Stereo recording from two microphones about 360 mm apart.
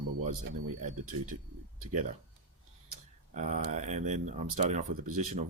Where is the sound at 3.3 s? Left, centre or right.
Centre.